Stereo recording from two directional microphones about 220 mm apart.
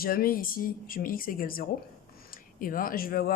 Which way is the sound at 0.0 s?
40° left (ahead or behind).